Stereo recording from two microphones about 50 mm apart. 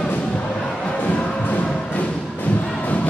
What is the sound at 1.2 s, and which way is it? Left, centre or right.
Music, centre.